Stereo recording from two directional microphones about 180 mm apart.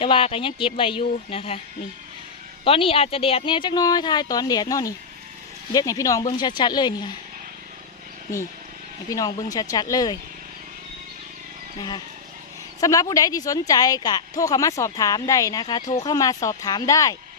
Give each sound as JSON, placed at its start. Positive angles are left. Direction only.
{"t": 0.0, "sound": "speech", "side_deg": 30}
{"t": 2.6, "sound": "speech", "side_deg": 30}
{"t": 9.0, "sound": "speech", "side_deg": 20}
{"t": 12.8, "sound": "speech", "side_deg": 20}